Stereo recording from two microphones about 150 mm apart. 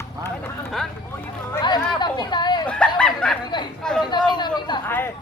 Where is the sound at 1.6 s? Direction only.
30° left (ahead or behind).